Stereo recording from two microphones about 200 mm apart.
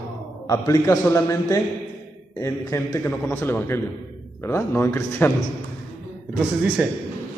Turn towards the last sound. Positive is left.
turn(degrees=-5)  # may be behind; listen again after turning